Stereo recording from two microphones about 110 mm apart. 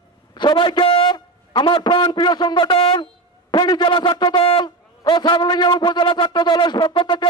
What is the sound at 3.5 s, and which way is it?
A man's voice, 40° left (ahead or behind).